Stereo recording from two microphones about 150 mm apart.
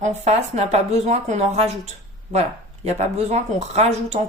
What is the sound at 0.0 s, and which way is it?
Speech, 50° right (ahead or behind).